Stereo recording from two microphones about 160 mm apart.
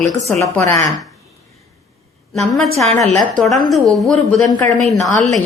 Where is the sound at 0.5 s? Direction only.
15° left (ahead or behind).